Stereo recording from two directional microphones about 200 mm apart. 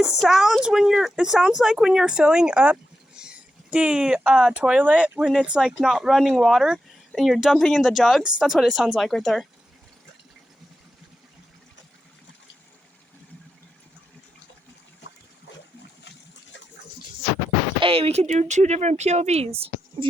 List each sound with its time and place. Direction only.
0.0 s speech: centre (ahead or behind)
17.7 s speech: 25° right (ahead or behind)